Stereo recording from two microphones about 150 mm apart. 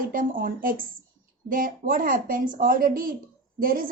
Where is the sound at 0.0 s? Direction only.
65° right (ahead or behind).